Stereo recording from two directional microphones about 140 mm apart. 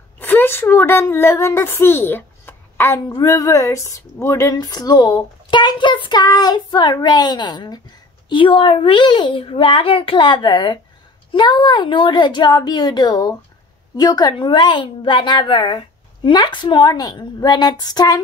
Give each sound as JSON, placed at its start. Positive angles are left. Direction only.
{"t": 0.2, "sound": "a woman's voice", "side_deg": 15}
{"t": 3.1, "sound": "a child's voice", "side_deg": 25}